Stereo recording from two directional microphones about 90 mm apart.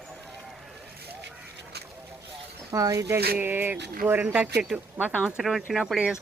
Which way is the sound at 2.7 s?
40° right (ahead or behind).